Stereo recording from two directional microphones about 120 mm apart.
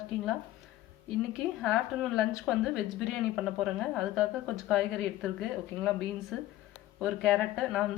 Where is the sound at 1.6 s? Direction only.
Centre (ahead or behind).